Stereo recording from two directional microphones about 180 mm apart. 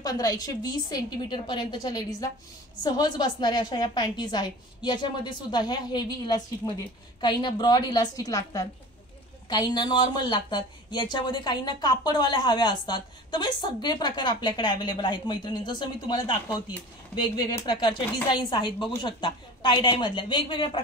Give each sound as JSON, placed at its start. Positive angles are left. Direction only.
{"t": 0.0, "sound": "a woman's voice", "side_deg": 20}